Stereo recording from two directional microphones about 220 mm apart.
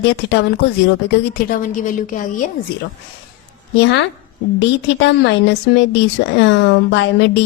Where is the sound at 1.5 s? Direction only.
35° left (ahead or behind).